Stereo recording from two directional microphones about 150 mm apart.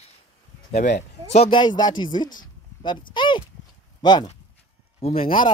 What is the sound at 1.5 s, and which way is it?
Speech, 30° left (ahead or behind).